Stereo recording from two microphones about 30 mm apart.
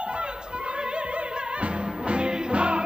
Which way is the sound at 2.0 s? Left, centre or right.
Right.